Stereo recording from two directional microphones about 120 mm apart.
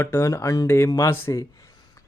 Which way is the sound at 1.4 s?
30° left (ahead or behind).